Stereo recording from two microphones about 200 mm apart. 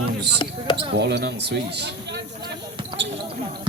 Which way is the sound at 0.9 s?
55° right (ahead or behind).